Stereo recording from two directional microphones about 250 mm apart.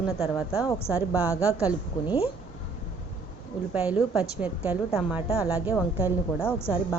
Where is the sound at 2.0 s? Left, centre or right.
Left.